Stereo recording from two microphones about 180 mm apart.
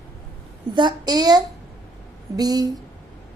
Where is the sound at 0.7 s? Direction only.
25° right (ahead or behind).